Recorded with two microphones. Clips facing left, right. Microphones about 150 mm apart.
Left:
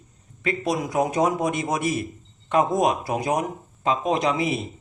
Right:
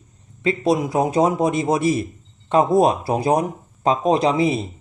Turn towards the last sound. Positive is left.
turn(degrees=-30)  # may be behind; listen again after turning